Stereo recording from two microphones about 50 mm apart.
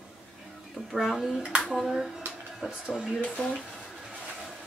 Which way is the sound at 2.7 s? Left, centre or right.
Centre.